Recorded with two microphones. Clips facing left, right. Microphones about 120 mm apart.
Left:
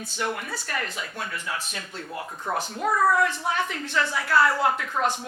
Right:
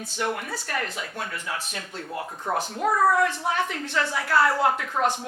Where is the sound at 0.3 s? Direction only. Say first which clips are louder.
Right 2 dB; 40° right (ahead or behind).